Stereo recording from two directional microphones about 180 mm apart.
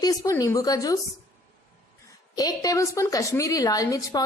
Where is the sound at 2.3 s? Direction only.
20° left (ahead or behind).